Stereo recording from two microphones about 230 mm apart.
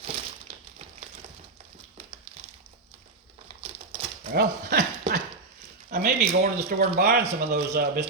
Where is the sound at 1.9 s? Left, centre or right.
Right.